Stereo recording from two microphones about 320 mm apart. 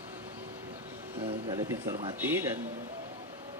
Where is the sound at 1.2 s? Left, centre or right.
Centre.